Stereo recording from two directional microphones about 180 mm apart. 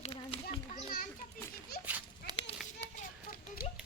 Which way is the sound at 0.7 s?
50° left (ahead or behind).